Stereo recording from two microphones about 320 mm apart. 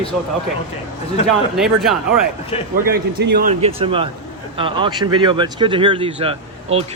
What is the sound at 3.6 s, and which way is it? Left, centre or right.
Speech, centre.